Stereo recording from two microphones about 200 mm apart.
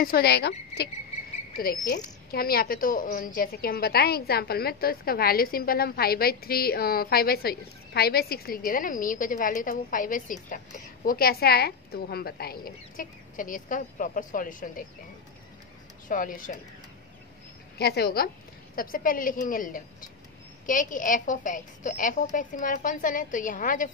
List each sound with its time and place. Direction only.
0.0 s a woman's voice: 50° left (ahead or behind)
16.1 s a woman's voice: 40° left (ahead or behind)
17.7 s a woman's voice: 50° left (ahead or behind)